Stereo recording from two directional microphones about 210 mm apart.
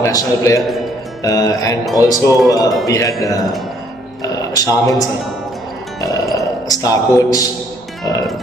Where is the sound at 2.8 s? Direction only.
15° left (ahead or behind).